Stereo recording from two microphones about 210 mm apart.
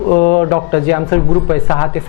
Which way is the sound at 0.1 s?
30° left (ahead or behind).